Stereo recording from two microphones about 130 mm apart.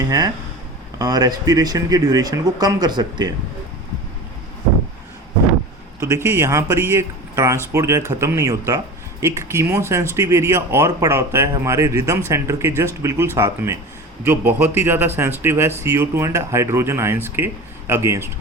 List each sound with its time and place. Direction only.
0.0 s speech: 30° right (ahead or behind)
6.0 s a man's voice: 20° right (ahead or behind)